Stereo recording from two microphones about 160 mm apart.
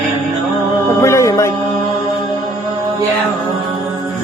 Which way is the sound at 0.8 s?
15° left (ahead or behind).